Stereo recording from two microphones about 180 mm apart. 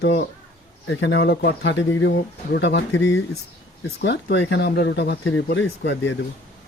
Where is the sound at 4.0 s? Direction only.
70° left (ahead or behind).